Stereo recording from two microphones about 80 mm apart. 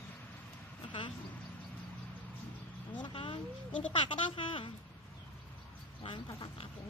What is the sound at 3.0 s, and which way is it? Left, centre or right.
Speech, left.